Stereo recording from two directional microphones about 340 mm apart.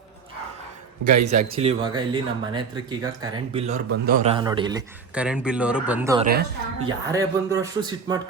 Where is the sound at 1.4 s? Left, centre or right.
Centre.